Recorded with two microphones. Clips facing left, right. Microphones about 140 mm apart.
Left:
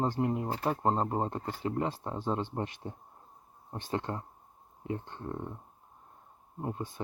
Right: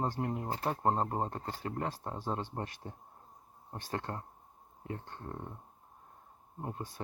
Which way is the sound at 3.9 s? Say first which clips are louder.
Left 4 dB; 20° left (ahead or behind).